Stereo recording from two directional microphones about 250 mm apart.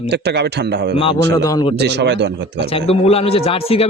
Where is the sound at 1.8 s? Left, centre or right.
Right.